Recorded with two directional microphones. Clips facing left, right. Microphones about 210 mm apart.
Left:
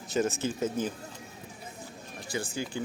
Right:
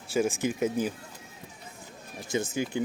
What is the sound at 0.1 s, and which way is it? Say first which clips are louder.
Speech: right 2 dB; 10° right (ahead or behind).